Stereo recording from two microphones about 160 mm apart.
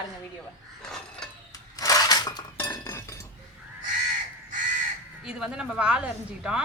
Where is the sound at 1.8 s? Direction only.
20° left (ahead or behind).